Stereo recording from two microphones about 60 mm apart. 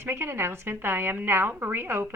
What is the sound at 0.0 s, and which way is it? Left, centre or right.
Speech, right.